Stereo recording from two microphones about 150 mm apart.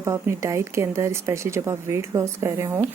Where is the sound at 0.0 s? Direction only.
20° right (ahead or behind).